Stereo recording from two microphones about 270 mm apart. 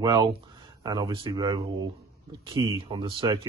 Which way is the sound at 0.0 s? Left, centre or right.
Centre.